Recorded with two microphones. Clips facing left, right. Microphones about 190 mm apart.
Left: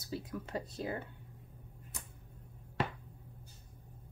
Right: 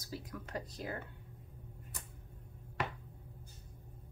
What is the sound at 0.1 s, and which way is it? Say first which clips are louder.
Speech: left 4 dB; 25° left (ahead or behind).